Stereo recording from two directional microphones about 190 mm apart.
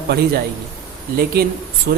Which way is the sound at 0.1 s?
60° right (ahead or behind).